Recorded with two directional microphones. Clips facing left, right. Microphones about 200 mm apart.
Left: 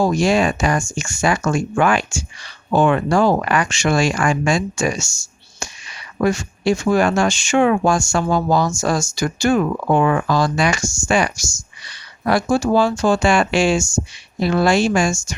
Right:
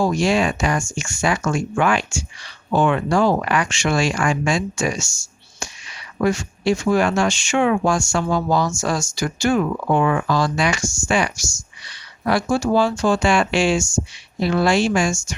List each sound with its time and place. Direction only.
0.0 s speech: 40° left (ahead or behind)
6.2 s speech: 40° left (ahead or behind)